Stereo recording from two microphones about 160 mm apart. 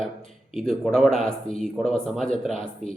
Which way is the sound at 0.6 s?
5° left (ahead or behind).